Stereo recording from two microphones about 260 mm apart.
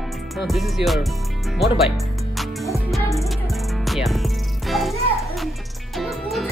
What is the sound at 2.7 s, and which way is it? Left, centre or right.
Music, centre.